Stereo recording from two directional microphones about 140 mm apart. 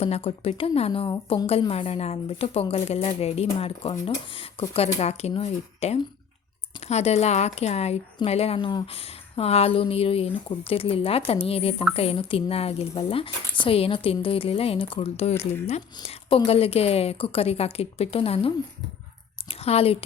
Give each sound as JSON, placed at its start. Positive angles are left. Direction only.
{"t": 0.0, "sound": "a woman's voice", "side_deg": 45}